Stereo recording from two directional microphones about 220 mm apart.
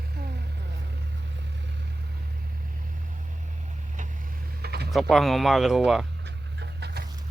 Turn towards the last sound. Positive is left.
turn(degrees=-50)  # may be behind; listen again after turning